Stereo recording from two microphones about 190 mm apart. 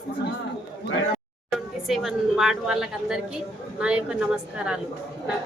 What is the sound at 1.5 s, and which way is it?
A woman's voice, centre (ahead or behind).